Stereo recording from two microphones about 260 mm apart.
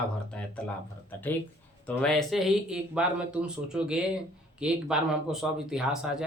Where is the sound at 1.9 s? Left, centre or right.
Centre.